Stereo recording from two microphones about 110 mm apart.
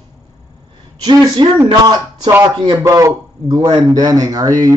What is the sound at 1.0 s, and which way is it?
A man's voice, 40° right (ahead or behind).